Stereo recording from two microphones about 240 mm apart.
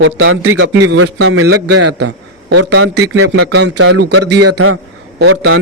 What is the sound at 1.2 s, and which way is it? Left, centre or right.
Speech, right.